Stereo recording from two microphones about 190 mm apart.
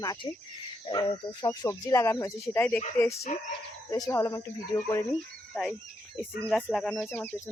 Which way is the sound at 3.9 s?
15° left (ahead or behind).